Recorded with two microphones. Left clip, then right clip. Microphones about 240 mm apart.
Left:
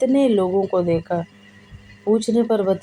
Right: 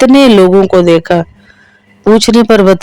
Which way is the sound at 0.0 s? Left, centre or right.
Right.